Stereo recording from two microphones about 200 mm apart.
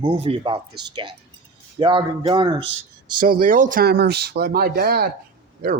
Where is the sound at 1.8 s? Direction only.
25° right (ahead or behind).